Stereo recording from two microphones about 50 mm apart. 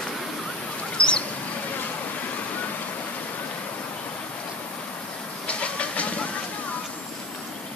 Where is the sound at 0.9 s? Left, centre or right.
Centre.